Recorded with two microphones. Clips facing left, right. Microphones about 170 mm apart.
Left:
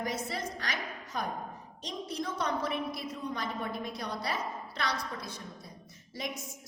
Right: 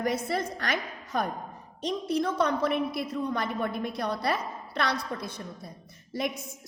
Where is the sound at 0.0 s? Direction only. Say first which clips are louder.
Right 6 dB; 60° right (ahead or behind).